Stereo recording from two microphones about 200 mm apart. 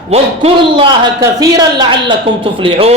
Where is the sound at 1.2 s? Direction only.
20° right (ahead or behind).